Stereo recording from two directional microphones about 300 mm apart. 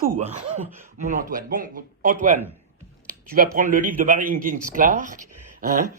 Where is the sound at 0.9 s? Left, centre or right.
Right.